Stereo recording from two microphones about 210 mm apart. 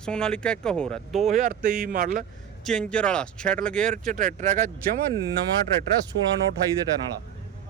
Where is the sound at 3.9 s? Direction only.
40° right (ahead or behind).